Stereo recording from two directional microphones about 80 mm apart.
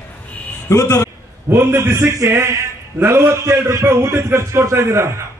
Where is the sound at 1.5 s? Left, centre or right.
Right.